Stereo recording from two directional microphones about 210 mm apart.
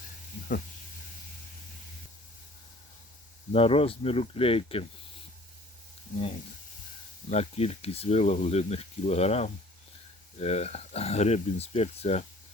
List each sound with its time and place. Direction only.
3.5 s speech: 25° left (ahead or behind)
7.3 s speech: 30° left (ahead or behind)